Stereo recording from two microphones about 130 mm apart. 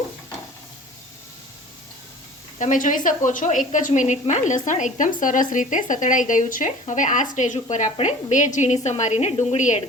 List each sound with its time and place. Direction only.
2.6 s a woman's voice: 80° left